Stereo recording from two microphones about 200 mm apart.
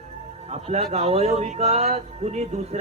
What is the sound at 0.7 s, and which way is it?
A man's voice, 30° right (ahead or behind).